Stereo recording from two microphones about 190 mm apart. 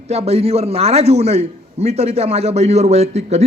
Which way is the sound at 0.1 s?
35° right (ahead or behind).